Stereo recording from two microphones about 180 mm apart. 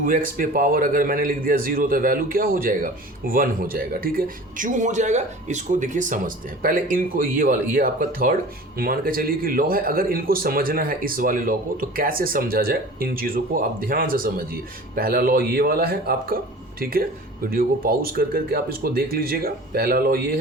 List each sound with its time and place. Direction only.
0.0 s a man's voice: 50° right (ahead or behind)